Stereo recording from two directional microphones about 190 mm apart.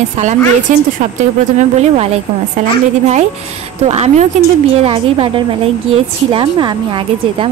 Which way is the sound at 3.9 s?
35° right (ahead or behind).